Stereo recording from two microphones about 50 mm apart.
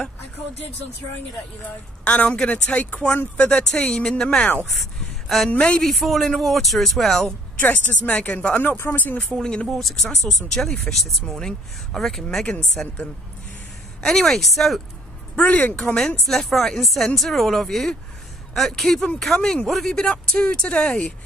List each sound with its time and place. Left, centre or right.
2.0 s speech: left
3.9 s speech: centre
5.8 s speech: centre
7.5 s speech: left
9.3 s speech: centre
12.8 s speech: left
14.0 s speech: centre
15.3 s speech: left
16.3 s speech: centre; by 21.1 s left